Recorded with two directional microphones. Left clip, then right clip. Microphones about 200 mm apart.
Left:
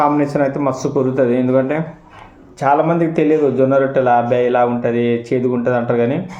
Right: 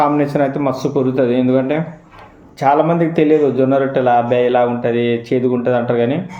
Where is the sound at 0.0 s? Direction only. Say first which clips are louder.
Even; 15° right (ahead or behind).